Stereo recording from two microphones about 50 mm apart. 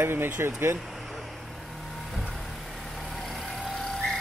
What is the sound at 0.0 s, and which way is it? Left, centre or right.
Speech, right.